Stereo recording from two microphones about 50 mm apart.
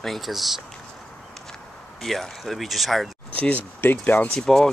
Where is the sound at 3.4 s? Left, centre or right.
Left.